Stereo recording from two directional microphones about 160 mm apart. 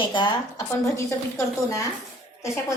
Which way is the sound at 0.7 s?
20° left (ahead or behind).